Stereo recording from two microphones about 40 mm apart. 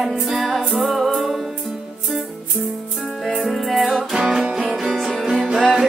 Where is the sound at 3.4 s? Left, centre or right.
Centre.